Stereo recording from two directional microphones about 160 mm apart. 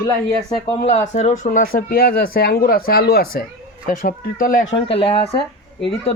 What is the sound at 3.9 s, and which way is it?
Speech, 60° left (ahead or behind).